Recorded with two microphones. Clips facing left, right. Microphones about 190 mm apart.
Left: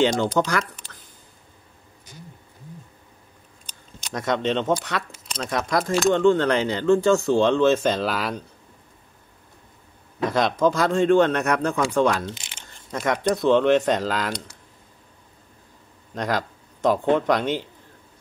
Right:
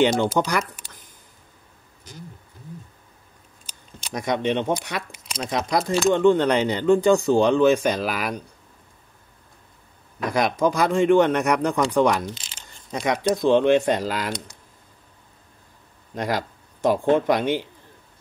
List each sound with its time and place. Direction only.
0.0 s speech: 10° right (ahead or behind)
3.6 s speech: 10° right (ahead or behind)
10.3 s speech: 15° right (ahead or behind)
16.2 s speech: 10° right (ahead or behind)